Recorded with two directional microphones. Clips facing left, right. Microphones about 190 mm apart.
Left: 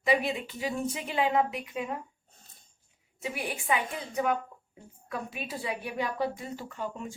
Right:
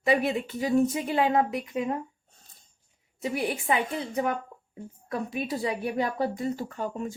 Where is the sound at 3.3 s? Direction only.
40° right (ahead or behind).